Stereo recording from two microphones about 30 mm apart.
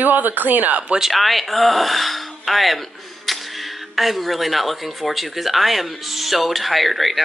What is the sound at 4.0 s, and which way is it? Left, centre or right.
Speech, centre.